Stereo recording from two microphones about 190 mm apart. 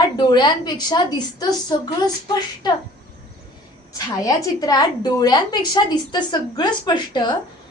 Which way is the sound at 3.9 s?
20° left (ahead or behind).